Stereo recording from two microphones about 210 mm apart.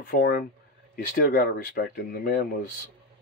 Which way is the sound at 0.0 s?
45° left (ahead or behind).